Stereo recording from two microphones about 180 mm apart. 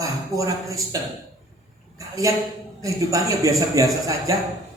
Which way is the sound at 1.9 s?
20° right (ahead or behind).